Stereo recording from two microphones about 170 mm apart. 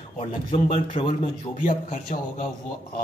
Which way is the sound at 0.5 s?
30° left (ahead or behind).